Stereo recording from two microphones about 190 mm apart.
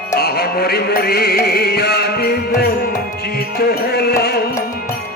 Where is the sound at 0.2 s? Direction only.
55° left (ahead or behind).